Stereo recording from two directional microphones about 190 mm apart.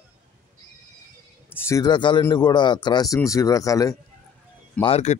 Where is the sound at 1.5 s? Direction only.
15° left (ahead or behind).